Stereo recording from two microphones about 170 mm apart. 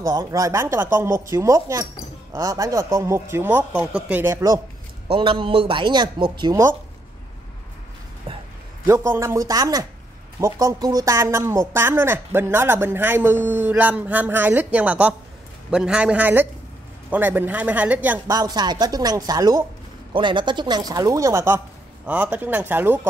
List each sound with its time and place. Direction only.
0.0 s speech: 20° right (ahead or behind)
5.0 s speech: 30° right (ahead or behind)
6.5 s speech: 15° right (ahead or behind)
8.8 s speech: 15° right (ahead or behind)
18.3 s speech: 25° right (ahead or behind)